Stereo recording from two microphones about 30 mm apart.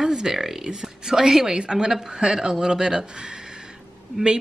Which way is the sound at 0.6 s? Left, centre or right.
Right.